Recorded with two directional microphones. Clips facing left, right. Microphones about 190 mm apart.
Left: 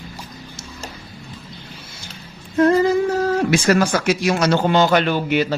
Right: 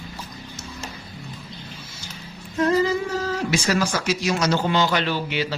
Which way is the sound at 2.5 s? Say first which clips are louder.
Left 5 dB; 55° left (ahead or behind).